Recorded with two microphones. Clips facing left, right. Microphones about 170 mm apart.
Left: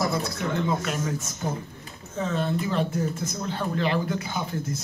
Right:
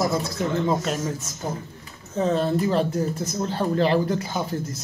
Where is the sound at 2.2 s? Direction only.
35° right (ahead or behind).